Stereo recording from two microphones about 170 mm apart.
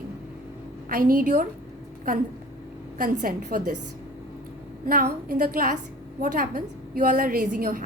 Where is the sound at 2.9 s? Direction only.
55° right (ahead or behind).